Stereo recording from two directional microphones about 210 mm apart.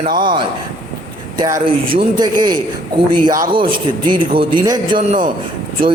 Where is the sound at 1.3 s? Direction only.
20° right (ahead or behind).